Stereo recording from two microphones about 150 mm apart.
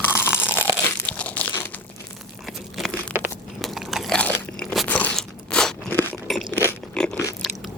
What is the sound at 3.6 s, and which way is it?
Crunch, centre (ahead or behind).